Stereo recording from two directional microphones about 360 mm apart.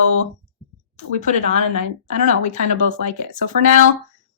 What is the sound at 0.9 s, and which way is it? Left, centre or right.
Speech, centre.